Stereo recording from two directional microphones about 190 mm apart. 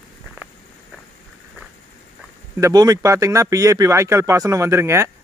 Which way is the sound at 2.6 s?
20° right (ahead or behind).